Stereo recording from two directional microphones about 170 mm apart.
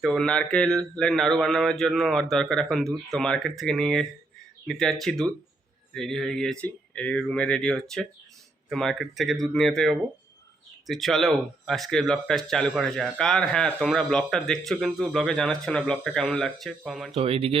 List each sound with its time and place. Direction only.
0.0 s speech: 5° left (ahead or behind)
17.2 s speech: 35° right (ahead or behind)